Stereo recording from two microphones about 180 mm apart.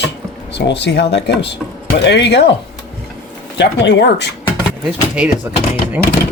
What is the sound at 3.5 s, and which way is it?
Speech, 80° left.